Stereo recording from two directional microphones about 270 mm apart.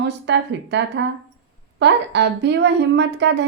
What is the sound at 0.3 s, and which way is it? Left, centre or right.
A woman's voice, right.